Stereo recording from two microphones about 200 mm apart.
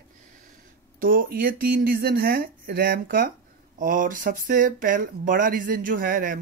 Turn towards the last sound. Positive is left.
turn(degrees=-45)  # may be behind; listen again after turning